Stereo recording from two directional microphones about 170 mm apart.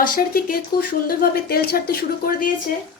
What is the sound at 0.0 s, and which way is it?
A woman's voice, 60° left (ahead or behind).